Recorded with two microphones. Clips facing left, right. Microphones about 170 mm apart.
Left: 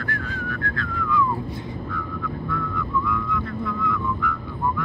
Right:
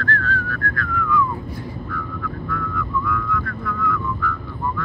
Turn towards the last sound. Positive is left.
turn(degrees=20)  # may be behind; listen again after turning